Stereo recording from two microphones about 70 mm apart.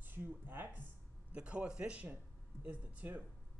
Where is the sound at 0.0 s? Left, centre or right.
Right.